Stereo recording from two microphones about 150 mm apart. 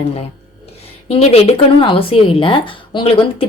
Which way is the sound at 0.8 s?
45° left (ahead or behind).